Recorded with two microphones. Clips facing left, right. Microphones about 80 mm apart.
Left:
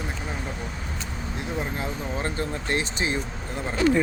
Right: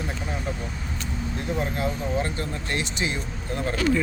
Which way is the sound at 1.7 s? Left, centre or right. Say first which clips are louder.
Right 4 dB; left.